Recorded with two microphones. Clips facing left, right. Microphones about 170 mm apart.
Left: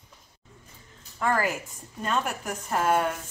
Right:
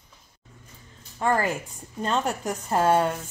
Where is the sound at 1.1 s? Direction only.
25° right (ahead or behind).